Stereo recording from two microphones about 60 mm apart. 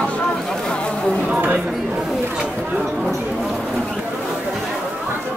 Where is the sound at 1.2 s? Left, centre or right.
Right.